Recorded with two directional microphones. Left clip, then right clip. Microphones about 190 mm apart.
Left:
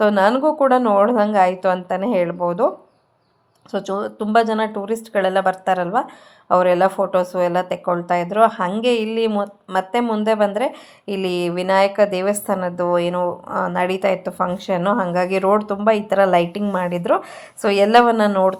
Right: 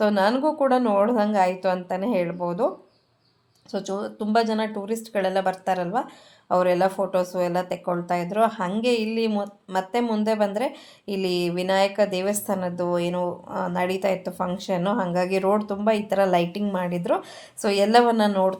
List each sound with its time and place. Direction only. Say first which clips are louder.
0.0 s speech: left 6 dB; 20° left (ahead or behind)